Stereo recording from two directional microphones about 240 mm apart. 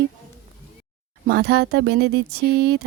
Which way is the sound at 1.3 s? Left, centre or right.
Right.